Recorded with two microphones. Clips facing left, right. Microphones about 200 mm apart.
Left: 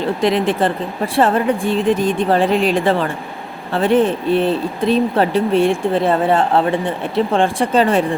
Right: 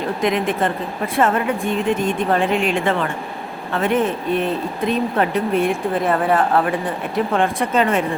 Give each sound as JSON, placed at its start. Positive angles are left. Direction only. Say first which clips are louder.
{"t": 0.2, "sound": "speech", "louder": "left 3 dB", "side_deg": 30}